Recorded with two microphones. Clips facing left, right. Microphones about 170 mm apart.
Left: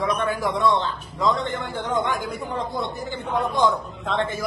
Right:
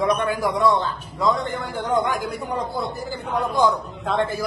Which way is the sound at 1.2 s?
Centre (ahead or behind).